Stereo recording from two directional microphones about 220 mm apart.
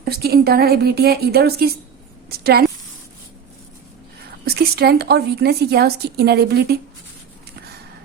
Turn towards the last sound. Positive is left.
turn(degrees=-45)  # may be behind; listen again after turning